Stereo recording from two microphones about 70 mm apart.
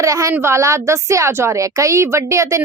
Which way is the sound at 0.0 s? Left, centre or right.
Right.